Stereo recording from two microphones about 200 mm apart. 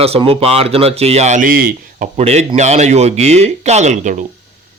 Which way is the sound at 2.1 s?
30° right (ahead or behind).